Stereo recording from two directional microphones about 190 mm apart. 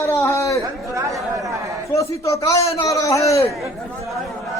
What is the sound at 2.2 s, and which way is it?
A man's voice, 15° left (ahead or behind).